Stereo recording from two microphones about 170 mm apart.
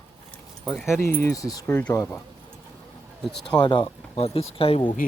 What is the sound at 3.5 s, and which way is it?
Speech, 25° left (ahead or behind).